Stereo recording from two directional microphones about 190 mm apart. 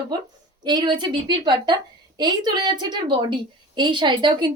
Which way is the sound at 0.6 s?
20° right (ahead or behind).